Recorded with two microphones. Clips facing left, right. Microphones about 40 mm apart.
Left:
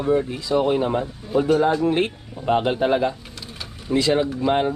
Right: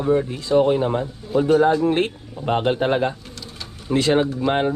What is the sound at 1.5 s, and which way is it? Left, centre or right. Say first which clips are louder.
Speech: right 4 dB; right.